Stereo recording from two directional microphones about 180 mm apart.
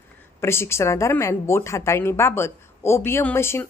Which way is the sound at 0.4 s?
15° left (ahead or behind).